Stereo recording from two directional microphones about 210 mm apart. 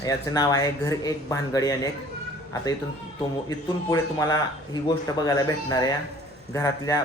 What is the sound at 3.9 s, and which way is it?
Speech, 15° left (ahead or behind).